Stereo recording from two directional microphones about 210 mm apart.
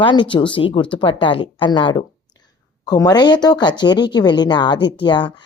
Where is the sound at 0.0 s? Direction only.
25° left (ahead or behind).